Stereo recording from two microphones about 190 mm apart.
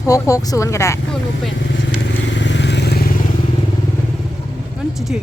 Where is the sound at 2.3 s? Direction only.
70° left (ahead or behind); by 3.1 s 55° left (ahead or behind).